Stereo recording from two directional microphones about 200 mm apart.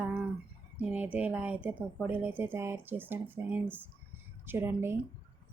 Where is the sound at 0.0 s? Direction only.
5° right (ahead or behind).